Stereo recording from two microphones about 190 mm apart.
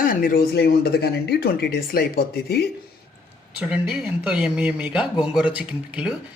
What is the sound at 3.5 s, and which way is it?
A man's voice, 5° right (ahead or behind).